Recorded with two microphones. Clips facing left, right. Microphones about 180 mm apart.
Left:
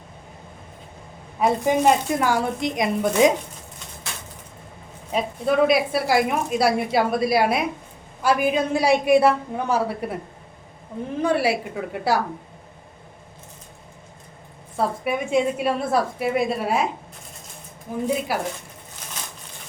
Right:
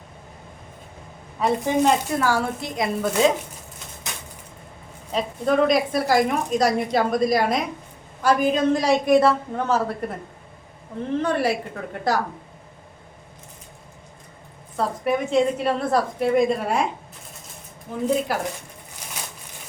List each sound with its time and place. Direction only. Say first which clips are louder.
1.4 s a woman's voice: left 1 dB; 15° left (ahead or behind)
5.1 s a woman's voice: even; 5° left (ahead or behind)
11.2 s a woman's voice: left 3 dB; 10° left (ahead or behind)
15.0 s a woman's voice: right 3 dB; 10° left (ahead or behind)
17.9 s a woman's voice: right 1 dB; 10° left (ahead or behind)